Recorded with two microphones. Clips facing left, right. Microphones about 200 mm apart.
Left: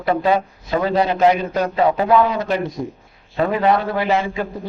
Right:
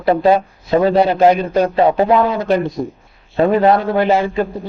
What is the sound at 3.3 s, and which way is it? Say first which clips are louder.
Speech: right 6 dB; 25° right (ahead or behind).